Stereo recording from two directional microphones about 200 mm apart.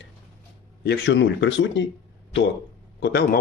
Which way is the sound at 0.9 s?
60° left (ahead or behind).